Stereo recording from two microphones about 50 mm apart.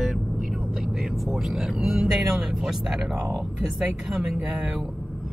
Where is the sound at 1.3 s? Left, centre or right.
Centre.